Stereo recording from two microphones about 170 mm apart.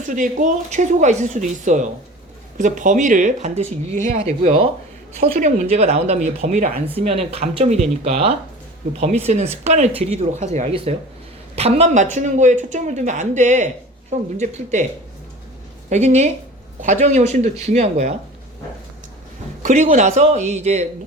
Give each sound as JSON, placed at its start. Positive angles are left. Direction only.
{"t": 0.1, "sound": "speech", "side_deg": -50}
{"t": 4.2, "sound": "speech", "side_deg": -35}
{"t": 5.1, "sound": "speech", "side_deg": -50}
{"t": 6.9, "sound": "speech", "side_deg": -40}
{"t": 15.9, "sound": "speech", "side_deg": -40}
{"t": 19.6, "sound": "speech", "side_deg": -45}